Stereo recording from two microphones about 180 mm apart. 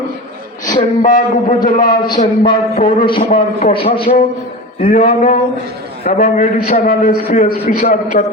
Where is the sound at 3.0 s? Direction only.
30° left (ahead or behind).